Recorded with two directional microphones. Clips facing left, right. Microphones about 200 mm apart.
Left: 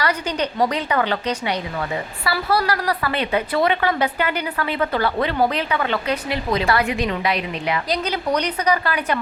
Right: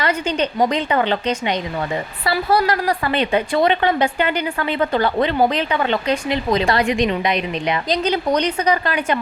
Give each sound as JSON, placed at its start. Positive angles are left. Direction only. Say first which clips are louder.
{"t": 0.0, "sound": "a woman's voice", "louder": "right 3 dB", "side_deg": -25}